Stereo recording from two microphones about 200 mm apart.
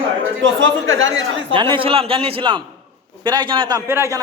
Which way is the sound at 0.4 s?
70° right (ahead or behind).